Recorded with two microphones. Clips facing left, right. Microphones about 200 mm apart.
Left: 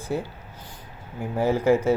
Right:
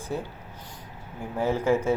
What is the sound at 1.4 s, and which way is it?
Speech, 10° left (ahead or behind).